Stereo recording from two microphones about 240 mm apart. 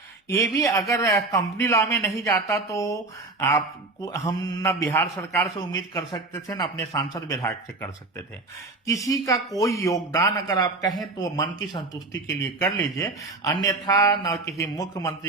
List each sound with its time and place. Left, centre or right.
0.5 s speech: centre
4.0 s speech: centre
8.9 s speech: centre